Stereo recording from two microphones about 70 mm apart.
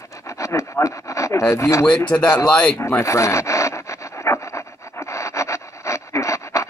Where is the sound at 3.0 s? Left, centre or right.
Left.